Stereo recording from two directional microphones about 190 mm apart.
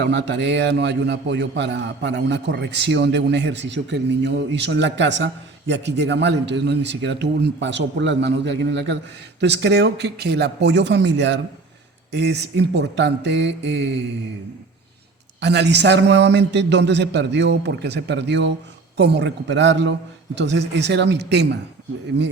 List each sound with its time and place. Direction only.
0.0 s a man's voice: 65° right (ahead or behind)
15.4 s a man's voice: 65° right (ahead or behind)